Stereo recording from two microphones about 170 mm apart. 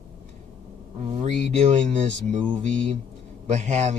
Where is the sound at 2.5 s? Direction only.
45° right (ahead or behind).